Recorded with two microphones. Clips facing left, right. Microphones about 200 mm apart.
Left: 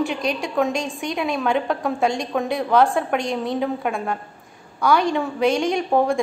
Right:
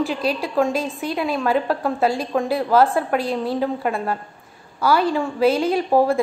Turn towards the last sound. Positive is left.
turn(degrees=-5)  # may be behind; listen again after turning